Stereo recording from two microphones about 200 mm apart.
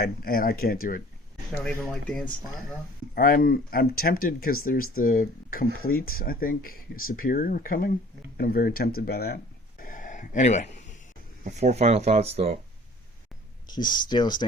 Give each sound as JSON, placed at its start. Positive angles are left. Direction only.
{"t": 0.0, "sound": "speech", "side_deg": 50}
{"t": 1.5, "sound": "speech", "side_deg": 5}
{"t": 3.2, "sound": "speech", "side_deg": 45}
{"t": 11.4, "sound": "speech", "side_deg": -35}
{"t": 13.7, "sound": "speech", "side_deg": 20}